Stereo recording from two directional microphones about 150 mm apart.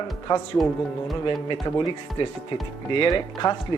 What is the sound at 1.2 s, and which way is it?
Speech, 35° left (ahead or behind).